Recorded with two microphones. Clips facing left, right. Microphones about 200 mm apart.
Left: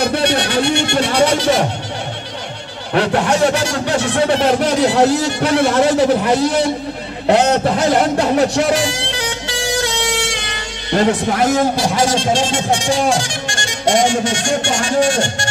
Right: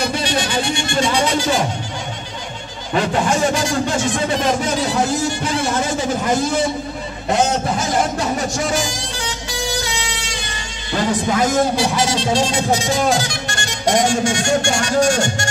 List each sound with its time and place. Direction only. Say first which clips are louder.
0.0 s music: left 4 dB; 65° left (ahead or behind)
2.9 s speech: left 3 dB; 65° left (ahead or behind)
11.0 s a man's voice: left 3 dB; 60° left (ahead or behind)
12.8 s speech: left 2 dB; 35° left (ahead or behind)
14.6 s music: left 1 dB; 40° right (ahead or behind)